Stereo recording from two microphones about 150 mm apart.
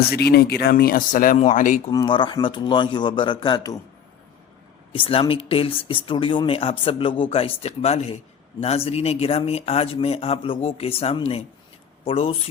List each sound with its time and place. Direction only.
0.1 s speech: 90° left; by 1.8 s 60° left (ahead or behind)
1.9 s speech: 30° left (ahead or behind)
4.9 s speech: 35° left (ahead or behind)